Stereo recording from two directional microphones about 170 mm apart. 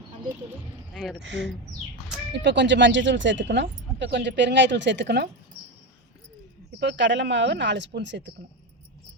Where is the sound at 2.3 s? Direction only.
90° right.